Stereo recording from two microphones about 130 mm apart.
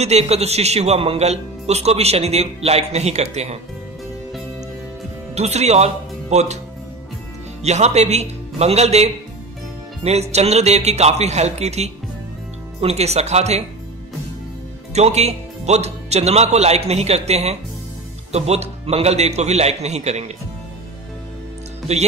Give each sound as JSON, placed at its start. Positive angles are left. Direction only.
{"t": 0.0, "sound": "a man's voice", "side_deg": -55}
{"t": 5.3, "sound": "speech", "side_deg": -60}
{"t": 7.6, "sound": "speech", "side_deg": -60}
{"t": 15.0, "sound": "speech", "side_deg": -55}
{"t": 21.9, "sound": "speech", "side_deg": -55}